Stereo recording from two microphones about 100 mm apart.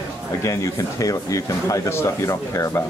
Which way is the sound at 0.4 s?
30° left (ahead or behind).